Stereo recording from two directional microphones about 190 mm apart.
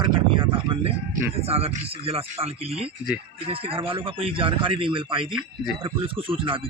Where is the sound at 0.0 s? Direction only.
25° right (ahead or behind).